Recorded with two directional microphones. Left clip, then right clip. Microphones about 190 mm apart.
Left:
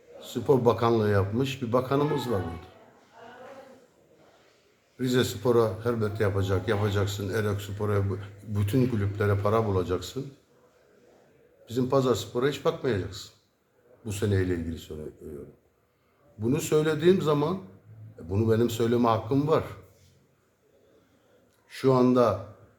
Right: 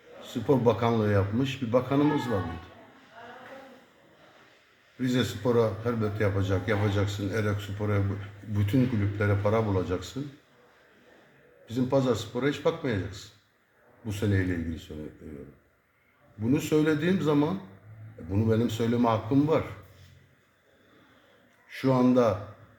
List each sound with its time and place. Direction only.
0.5 s a man's voice: 25° left (ahead or behind)
5.0 s a man's voice: 25° left (ahead or behind)
11.6 s a man's voice: 25° left (ahead or behind)
16.4 s a man's voice: 25° left (ahead or behind)
21.8 s a man's voice: 25° left (ahead or behind)